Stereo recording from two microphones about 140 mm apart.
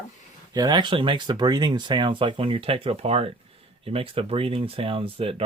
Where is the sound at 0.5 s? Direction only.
30° right (ahead or behind).